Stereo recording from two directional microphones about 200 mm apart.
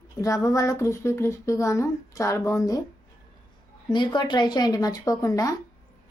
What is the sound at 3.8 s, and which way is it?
A woman's voice, 20° left (ahead or behind).